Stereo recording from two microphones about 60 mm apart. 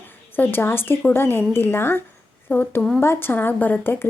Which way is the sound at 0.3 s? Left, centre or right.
Left.